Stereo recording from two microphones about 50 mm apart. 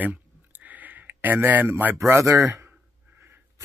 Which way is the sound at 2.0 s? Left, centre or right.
Right.